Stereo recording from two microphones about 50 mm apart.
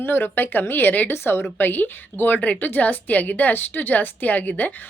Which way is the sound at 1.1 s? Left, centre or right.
Left.